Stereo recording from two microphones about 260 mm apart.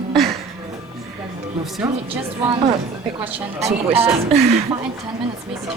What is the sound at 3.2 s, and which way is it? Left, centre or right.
Speech, centre.